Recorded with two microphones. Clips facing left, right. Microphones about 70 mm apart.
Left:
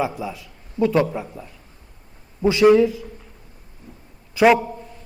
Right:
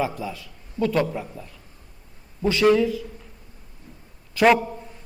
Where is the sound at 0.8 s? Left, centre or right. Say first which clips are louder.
Left 4 dB; centre.